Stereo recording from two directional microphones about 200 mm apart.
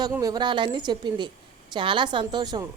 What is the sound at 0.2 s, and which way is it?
A woman's voice, 20° right (ahead or behind).